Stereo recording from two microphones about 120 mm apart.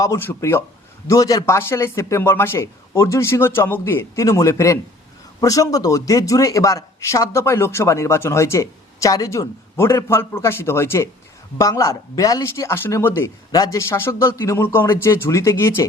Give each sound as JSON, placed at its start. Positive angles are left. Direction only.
{"t": 0.2, "sound": "speech", "side_deg": 20}